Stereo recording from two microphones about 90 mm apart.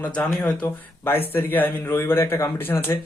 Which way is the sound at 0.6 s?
20° left (ahead or behind).